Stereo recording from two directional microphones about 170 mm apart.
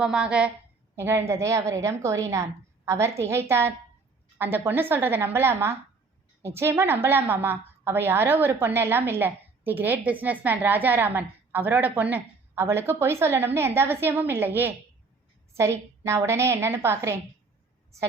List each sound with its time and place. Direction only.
0.0 s a woman's voice: 5° right (ahead or behind)
15.5 s a woman's voice: 15° right (ahead or behind)